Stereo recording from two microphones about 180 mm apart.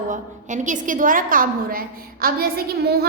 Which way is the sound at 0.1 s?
45° right (ahead or behind).